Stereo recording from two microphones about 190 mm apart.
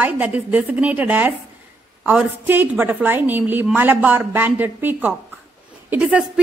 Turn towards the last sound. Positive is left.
turn(degrees=-5)  # may be behind; listen again after turning